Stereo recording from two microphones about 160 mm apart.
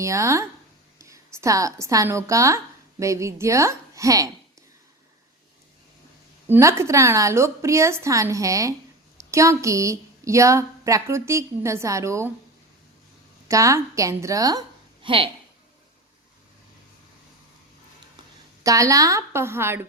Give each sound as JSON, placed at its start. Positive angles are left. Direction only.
{"t": 0.0, "sound": "a woman's voice", "side_deg": -20}
{"t": 6.5, "sound": "a woman's voice", "side_deg": -15}
{"t": 13.5, "sound": "a woman's voice", "side_deg": -20}
{"t": 15.0, "sound": "speech", "side_deg": -35}
{"t": 18.6, "sound": "a woman's voice", "side_deg": -20}